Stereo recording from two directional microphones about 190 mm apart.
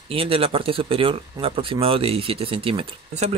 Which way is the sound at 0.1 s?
30° right (ahead or behind).